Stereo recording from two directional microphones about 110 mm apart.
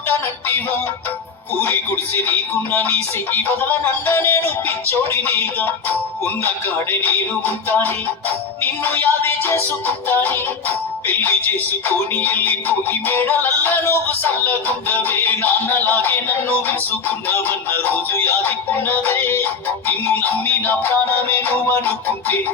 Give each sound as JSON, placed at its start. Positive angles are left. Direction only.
{"t": 1.6, "sound": "music", "side_deg": 20}